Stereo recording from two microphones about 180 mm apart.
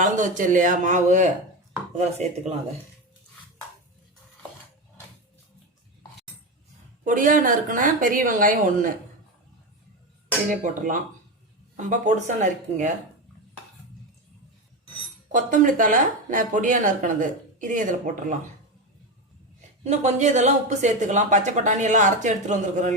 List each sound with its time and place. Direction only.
0.0 s speech: 45° right (ahead or behind)
7.0 s speech: 50° right (ahead or behind)
10.5 s speech: 45° right (ahead or behind)
15.3 s speech: 45° right (ahead or behind)
19.8 s speech: 40° right (ahead or behind)